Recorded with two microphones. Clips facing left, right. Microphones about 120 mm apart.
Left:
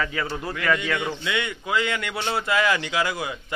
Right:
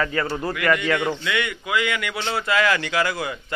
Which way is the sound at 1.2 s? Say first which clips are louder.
Right 2 dB; 25° left (ahead or behind).